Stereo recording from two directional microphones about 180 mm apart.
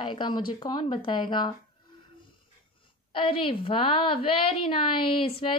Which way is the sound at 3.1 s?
30° left (ahead or behind).